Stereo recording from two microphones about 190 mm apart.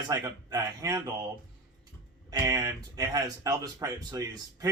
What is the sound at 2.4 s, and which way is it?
Speech, 20° right (ahead or behind).